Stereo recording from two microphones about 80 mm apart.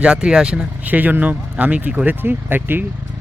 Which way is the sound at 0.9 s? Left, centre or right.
Right.